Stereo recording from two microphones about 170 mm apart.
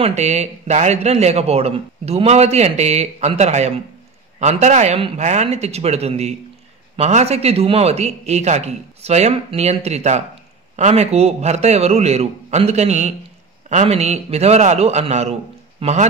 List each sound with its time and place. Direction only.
0.0 s speech: 40° right (ahead or behind)